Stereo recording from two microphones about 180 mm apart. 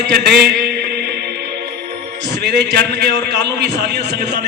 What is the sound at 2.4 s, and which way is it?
A man's voice, 65° right (ahead or behind).